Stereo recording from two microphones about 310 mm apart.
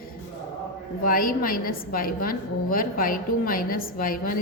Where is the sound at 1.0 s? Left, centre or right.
Left.